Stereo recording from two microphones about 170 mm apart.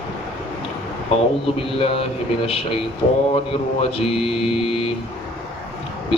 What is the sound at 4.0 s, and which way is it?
Speech, 35° left (ahead or behind).